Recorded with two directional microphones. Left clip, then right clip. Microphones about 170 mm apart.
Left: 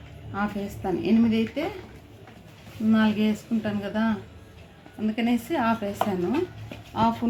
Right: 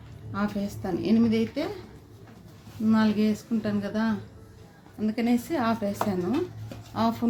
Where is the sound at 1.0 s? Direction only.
45° right (ahead or behind).